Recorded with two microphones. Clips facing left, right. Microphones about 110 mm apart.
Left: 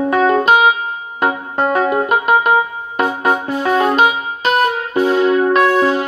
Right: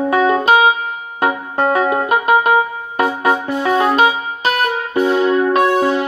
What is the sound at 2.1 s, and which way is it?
Music, 30° left (ahead or behind).